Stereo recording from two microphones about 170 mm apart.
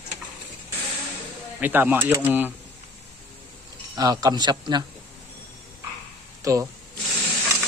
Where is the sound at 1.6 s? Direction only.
10° right (ahead or behind).